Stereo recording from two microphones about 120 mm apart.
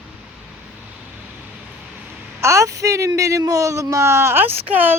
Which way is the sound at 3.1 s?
25° right (ahead or behind).